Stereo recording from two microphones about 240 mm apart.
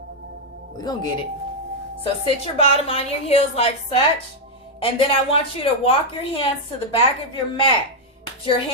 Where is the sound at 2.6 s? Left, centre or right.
Left.